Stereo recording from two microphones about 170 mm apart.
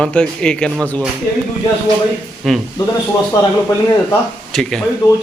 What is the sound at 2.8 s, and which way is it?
Speech, 25° left (ahead or behind).